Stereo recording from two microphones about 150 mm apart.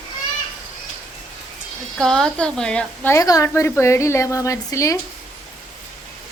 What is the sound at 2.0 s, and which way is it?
A woman's voice, 5° left (ahead or behind).